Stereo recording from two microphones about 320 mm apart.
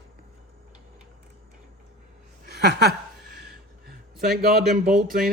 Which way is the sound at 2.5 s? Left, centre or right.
Right.